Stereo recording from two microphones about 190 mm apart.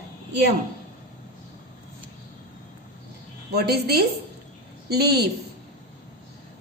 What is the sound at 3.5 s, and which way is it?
A woman's voice, 55° right (ahead or behind).